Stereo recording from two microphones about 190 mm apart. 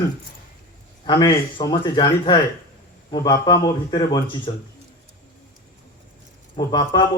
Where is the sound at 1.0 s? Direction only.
20° left (ahead or behind).